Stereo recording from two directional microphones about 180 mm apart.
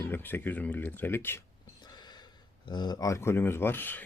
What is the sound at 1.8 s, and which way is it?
Speech, 25° left (ahead or behind).